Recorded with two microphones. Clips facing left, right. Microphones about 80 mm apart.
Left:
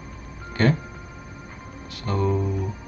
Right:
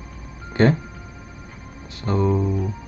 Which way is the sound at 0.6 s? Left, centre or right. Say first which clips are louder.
Right 4 dB; right.